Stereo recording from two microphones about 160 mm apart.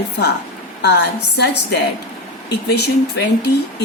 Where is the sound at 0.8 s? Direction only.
90° left.